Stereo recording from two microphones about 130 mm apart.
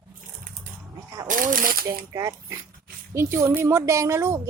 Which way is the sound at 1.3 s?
90° right.